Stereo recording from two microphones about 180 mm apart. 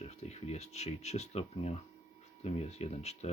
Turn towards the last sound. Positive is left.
turn(degrees=35)  # may be behind; listen again after turning